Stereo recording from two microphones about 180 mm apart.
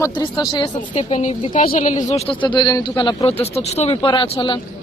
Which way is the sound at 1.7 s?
45° left (ahead or behind).